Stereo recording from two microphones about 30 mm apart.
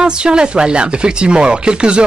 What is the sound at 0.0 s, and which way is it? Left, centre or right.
Speech, right.